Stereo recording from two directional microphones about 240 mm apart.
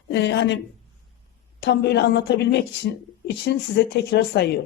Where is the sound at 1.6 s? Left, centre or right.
Left.